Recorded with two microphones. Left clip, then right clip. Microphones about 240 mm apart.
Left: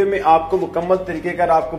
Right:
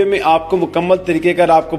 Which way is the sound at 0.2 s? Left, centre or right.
Right.